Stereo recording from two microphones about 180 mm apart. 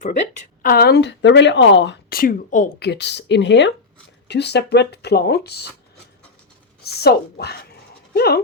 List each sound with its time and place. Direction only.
0.6 s speech: 55° left (ahead or behind)
2.7 s speech: 65° left (ahead or behind)
4.3 s speech: 70° left (ahead or behind)
6.8 s speech: 60° left (ahead or behind)